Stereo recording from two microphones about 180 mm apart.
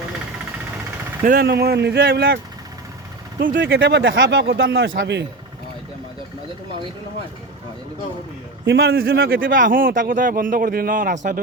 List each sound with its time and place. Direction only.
1.2 s speech: 55° right (ahead or behind)
3.6 s a man's voice: 80° right
8.6 s speech: 65° right (ahead or behind); by 11.3 s 45° right (ahead or behind)